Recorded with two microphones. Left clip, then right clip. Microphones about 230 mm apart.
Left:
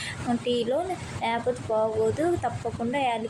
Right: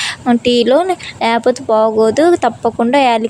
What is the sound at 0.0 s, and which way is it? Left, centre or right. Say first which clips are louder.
Speech: right 15 dB; right.